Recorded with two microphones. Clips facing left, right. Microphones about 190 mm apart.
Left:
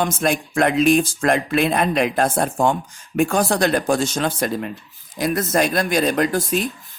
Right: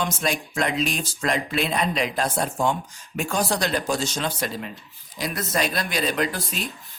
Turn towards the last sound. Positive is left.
turn(degrees=45)  # may be behind; listen again after turning